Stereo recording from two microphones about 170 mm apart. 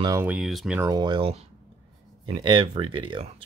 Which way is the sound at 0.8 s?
25° right (ahead or behind).